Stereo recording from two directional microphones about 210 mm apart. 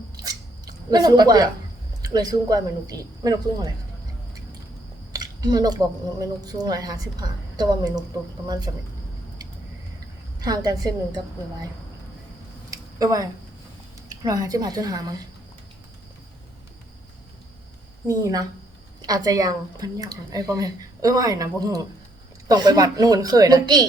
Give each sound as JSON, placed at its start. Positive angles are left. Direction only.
{"t": 0.2, "sound": "scissors", "side_deg": -20}
{"t": 2.0, "sound": "speech", "side_deg": -20}
{"t": 5.1, "sound": "speech", "side_deg": -20}
{"t": 10.4, "sound": "speech", "side_deg": -20}
{"t": 12.7, "sound": "a sound", "side_deg": -15}
{"t": 14.1, "sound": "speech", "side_deg": -15}
{"t": 18.1, "sound": "speech", "side_deg": -15}